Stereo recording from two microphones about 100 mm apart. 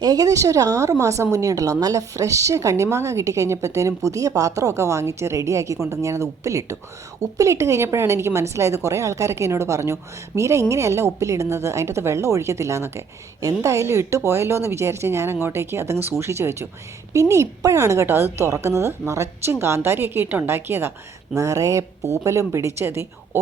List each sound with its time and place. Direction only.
0.0 s a woman's voice: 35° right (ahead or behind)